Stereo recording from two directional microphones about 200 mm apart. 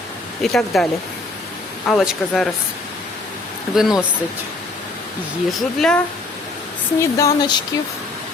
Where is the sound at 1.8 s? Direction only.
Centre (ahead or behind).